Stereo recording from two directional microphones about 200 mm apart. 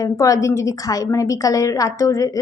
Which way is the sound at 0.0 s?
15° left (ahead or behind).